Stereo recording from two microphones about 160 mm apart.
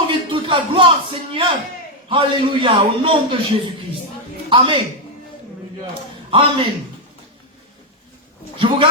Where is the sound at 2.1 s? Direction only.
30° right (ahead or behind).